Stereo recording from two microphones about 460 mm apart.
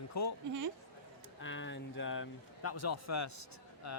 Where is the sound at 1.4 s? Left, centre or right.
Left.